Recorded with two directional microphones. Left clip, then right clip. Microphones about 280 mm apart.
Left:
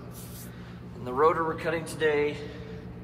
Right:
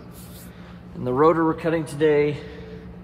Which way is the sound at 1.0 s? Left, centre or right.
Right.